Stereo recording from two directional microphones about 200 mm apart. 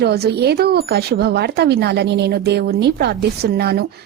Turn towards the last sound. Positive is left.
turn(degrees=-55)  # may be behind; listen again after turning